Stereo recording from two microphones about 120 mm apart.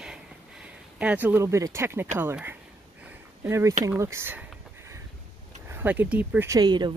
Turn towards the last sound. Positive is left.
turn(degrees=-35)  # may be behind; listen again after turning